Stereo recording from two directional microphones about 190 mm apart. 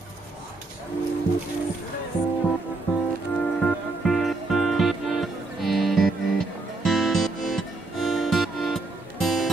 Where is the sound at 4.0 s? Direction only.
Centre (ahead or behind).